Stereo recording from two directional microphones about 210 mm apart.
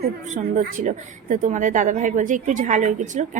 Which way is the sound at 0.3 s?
35° right (ahead or behind).